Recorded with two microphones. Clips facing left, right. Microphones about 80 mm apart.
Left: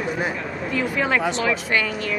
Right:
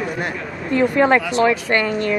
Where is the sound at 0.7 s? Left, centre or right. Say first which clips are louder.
Right 8 dB; right.